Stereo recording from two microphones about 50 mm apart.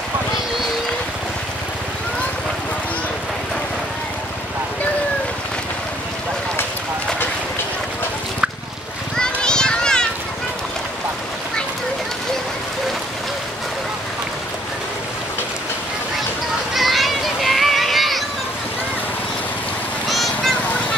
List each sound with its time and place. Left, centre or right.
9.1 s children playing: centre
16.7 s children playing: centre
20.1 s vehicle: centre